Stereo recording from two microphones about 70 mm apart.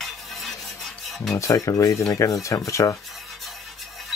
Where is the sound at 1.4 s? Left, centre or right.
Left.